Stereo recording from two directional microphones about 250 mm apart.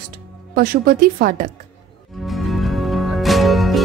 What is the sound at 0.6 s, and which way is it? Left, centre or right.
Speech, right.